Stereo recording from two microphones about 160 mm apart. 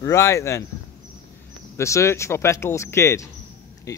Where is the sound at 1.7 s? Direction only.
20° left (ahead or behind).